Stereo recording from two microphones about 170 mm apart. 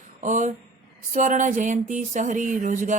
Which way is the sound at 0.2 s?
50° right (ahead or behind).